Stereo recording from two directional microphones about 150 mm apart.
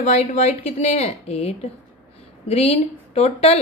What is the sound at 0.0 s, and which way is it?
A woman's voice, 50° left (ahead or behind).